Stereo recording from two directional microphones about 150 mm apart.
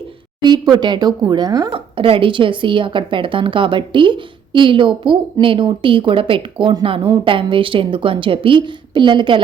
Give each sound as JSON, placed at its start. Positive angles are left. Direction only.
{"t": 0.4, "sound": "speech", "side_deg": -25}
{"t": 1.7, "sound": "speech", "side_deg": -35}